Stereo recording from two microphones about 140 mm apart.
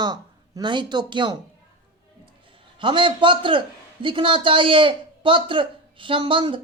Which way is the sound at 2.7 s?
35° right (ahead or behind).